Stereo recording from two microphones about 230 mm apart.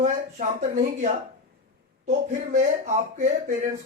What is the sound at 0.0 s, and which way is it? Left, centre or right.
Speech, right.